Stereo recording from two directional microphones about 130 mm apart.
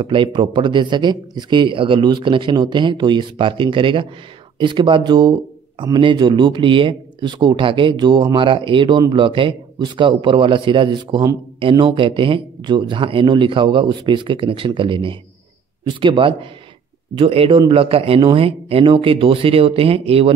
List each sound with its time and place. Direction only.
0.0 s a man's voice: 40° right (ahead or behind)